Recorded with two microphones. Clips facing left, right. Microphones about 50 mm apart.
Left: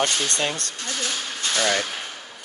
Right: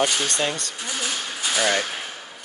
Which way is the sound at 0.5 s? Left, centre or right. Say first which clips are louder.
Even; centre.